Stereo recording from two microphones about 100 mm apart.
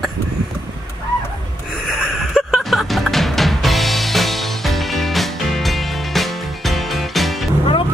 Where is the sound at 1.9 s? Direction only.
5° right (ahead or behind).